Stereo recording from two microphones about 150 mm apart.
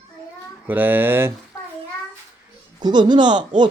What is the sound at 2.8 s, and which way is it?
Speech, 30° right (ahead or behind).